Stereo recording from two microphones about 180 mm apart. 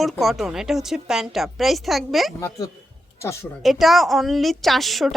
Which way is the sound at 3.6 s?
Centre (ahead or behind).